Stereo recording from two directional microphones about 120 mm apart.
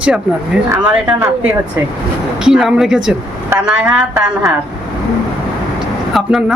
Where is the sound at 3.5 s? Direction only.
20° right (ahead or behind).